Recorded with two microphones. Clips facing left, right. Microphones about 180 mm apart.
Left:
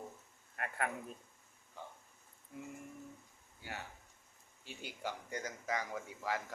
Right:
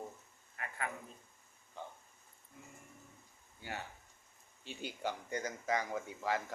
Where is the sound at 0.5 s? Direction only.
55° left (ahead or behind).